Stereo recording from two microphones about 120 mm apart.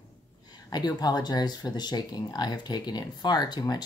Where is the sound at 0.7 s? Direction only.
35° left (ahead or behind).